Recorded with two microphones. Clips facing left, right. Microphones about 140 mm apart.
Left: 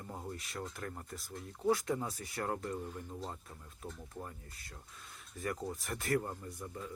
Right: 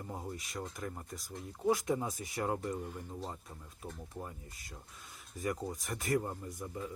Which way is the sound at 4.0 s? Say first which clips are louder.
Right 2 dB; 15° right (ahead or behind).